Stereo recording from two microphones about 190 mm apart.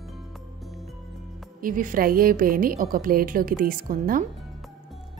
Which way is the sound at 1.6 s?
45° right (ahead or behind).